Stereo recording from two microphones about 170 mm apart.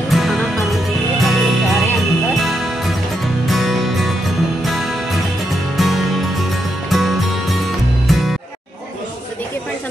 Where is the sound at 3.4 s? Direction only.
Centre (ahead or behind).